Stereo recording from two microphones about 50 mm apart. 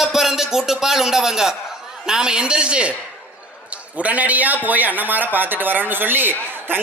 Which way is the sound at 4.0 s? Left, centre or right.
Right.